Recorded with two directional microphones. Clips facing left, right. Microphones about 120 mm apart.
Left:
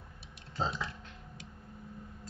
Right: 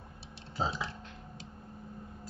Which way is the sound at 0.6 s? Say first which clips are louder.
Right 1 dB; 5° right (ahead or behind).